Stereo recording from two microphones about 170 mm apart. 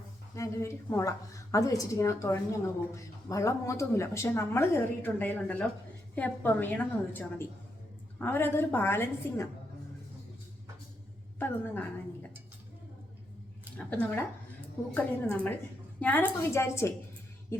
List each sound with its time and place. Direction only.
0.3 s a woman's voice: 15° left (ahead or behind)
11.3 s speech: 10° left (ahead or behind)
13.7 s speech: 10° left (ahead or behind)